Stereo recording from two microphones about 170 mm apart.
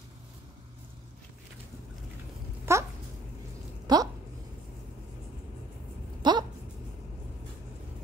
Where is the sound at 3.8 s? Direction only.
25° right (ahead or behind).